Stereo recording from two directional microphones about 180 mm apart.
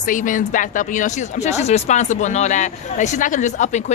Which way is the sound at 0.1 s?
45° left (ahead or behind).